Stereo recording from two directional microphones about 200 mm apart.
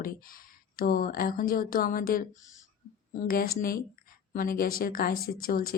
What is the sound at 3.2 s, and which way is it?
Speech, 45° left (ahead or behind).